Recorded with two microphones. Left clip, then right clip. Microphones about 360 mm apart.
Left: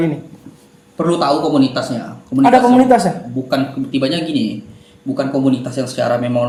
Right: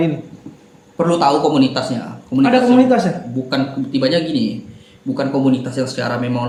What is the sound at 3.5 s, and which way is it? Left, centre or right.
Speech, centre.